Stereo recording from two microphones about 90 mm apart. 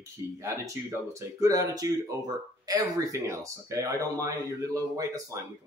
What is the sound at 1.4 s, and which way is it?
Speech, 35° right (ahead or behind).